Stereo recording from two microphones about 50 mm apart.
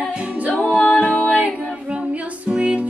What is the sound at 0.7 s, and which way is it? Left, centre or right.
Music, left.